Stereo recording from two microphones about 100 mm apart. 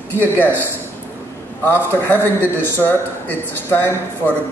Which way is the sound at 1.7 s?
20° left (ahead or behind).